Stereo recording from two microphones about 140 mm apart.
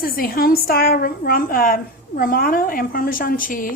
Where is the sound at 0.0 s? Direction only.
90° left.